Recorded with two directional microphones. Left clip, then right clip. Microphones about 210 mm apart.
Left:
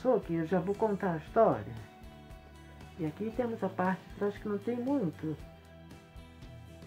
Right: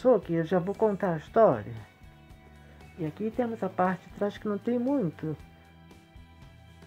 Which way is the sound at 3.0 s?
50° right (ahead or behind).